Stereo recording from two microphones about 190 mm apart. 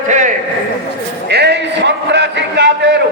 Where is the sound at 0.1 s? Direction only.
40° right (ahead or behind).